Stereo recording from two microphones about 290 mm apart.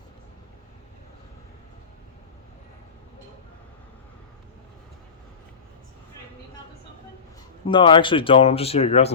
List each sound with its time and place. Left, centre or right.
7.7 s speech: centre